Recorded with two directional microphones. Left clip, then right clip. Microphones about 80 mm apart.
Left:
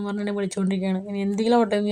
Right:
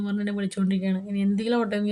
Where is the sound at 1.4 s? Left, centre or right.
Left.